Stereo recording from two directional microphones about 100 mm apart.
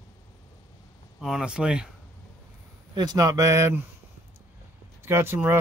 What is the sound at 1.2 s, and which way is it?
Speech, 5° right (ahead or behind).